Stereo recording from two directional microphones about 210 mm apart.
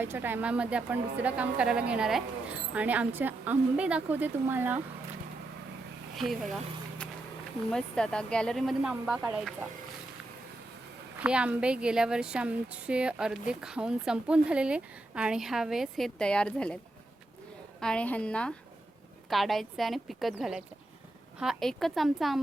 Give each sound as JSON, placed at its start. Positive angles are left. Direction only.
{"t": 0.0, "sound": "a woman's voice", "side_deg": -10}
{"t": 6.1, "sound": "a woman's voice", "side_deg": 0}
{"t": 7.7, "sound": "a woman's voice", "side_deg": 5}
{"t": 11.2, "sound": "a woman's voice", "side_deg": -5}
{"t": 17.7, "sound": "a woman's voice", "side_deg": 5}